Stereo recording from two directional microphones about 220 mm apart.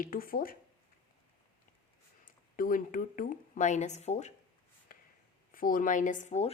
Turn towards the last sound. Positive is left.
turn(degrees=30)  # may be behind; listen again after turning